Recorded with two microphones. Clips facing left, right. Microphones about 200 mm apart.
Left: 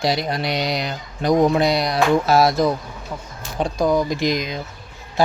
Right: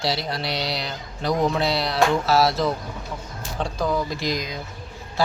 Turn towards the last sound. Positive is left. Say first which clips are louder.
# left 5 dB
turn(degrees=20)  # may be behind; listen again after turning